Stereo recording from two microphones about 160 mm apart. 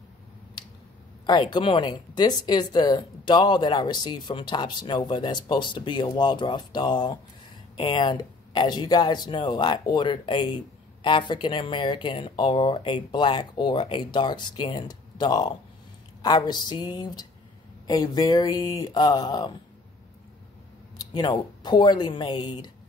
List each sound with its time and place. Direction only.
1.2 s speech: 30° left (ahead or behind)
21.0 s speech: 25° left (ahead or behind)